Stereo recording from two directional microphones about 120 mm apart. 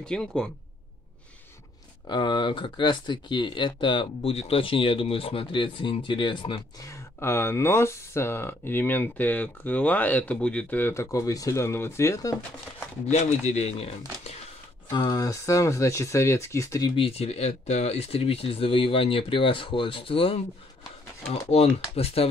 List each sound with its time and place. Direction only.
0.0 s speech: 5° left (ahead or behind)
2.0 s speech: 40° left (ahead or behind)
4.3 s speech: 55° left (ahead or behind)
6.8 s speech: 25° left (ahead or behind)
13.0 s speech: 65° left (ahead or behind)
14.9 s speech: 35° left (ahead or behind)
16.9 s speech: 55° left (ahead or behind)